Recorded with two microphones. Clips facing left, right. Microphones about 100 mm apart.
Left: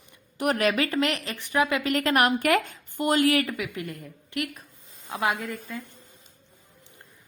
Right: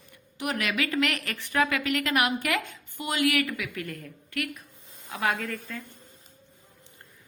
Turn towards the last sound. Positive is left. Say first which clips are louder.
# left 1 dB
turn(degrees=10)  # may be behind; listen again after turning